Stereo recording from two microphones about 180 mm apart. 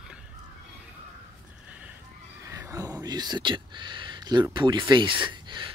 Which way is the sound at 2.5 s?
15° right (ahead or behind).